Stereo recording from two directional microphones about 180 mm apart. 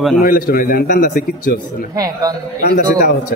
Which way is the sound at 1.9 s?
20° right (ahead or behind).